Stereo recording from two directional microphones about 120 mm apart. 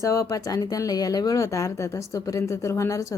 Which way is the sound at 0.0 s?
25° left (ahead or behind).